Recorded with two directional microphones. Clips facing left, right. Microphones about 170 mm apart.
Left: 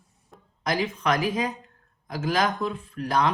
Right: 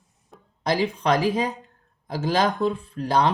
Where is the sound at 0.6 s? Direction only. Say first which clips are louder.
Right 3 dB; 30° right (ahead or behind).